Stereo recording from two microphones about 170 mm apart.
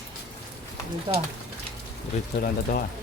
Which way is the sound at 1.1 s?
30° right (ahead or behind).